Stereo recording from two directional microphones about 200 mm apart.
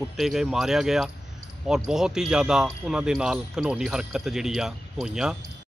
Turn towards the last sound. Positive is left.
turn(degrees=-5)  # may be behind; listen again after turning